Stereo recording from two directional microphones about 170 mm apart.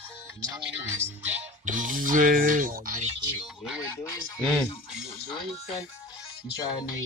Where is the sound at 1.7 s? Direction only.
50° right (ahead or behind).